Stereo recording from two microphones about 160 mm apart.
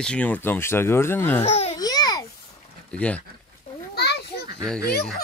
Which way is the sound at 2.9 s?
10° left (ahead or behind).